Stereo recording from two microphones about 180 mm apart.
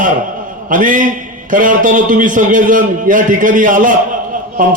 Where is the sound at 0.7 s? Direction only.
50° right (ahead or behind).